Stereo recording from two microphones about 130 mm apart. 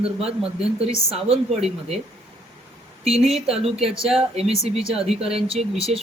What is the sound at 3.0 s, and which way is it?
Speech, 50° right (ahead or behind).